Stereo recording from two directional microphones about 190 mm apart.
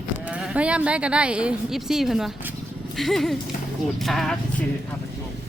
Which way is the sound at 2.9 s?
Centre (ahead or behind).